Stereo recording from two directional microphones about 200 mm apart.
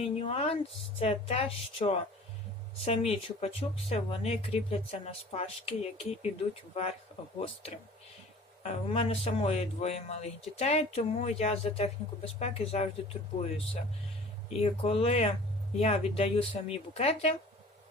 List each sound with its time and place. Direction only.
0.0 s speech: 30° left (ahead or behind)
14.5 s speech: 30° left (ahead or behind)